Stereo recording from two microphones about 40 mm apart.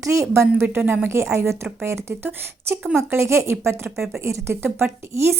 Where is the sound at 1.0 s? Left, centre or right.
Right.